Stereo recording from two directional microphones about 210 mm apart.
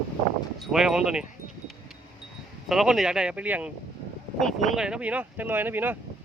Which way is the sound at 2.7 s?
Centre (ahead or behind).